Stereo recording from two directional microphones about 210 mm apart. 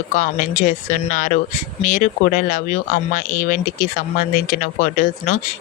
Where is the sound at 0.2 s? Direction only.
40° left (ahead or behind).